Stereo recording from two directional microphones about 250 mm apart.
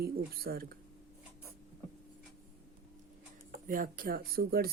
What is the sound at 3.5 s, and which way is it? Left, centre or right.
Speech, right.